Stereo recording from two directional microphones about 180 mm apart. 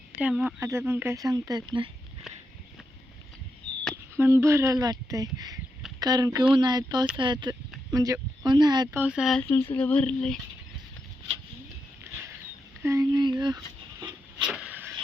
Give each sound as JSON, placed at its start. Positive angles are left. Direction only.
{"t": 0.2, "sound": "speech", "side_deg": -5}
{"t": 4.2, "sound": "speech", "side_deg": -15}
{"t": 8.9, "sound": "speech", "side_deg": -10}
{"t": 9.4, "sound": "speech", "side_deg": 15}
{"t": 12.1, "sound": "a sound", "side_deg": -15}
{"t": 12.8, "sound": "speech", "side_deg": -20}
{"t": 14.0, "sound": "a sound", "side_deg": -5}